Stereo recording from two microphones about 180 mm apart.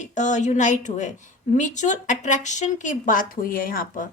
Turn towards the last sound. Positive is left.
turn(degrees=50)  # may be behind; listen again after turning